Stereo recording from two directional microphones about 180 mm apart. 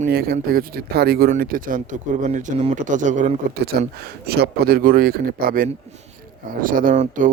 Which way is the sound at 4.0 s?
60° right (ahead or behind).